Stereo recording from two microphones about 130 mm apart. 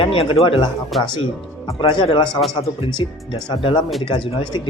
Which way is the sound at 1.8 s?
40° left (ahead or behind).